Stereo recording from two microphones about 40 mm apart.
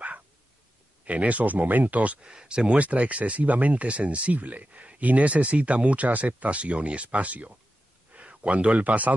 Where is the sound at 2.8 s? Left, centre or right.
Right.